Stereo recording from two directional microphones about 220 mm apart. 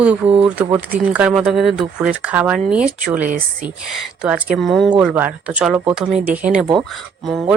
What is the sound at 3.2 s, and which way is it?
Speech, 40° right (ahead or behind).